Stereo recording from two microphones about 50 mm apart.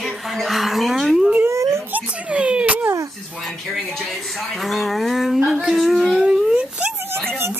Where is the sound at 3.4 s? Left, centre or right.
Centre.